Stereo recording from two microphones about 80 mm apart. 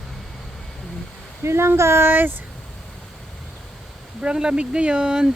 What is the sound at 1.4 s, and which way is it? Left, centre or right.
Speech, right.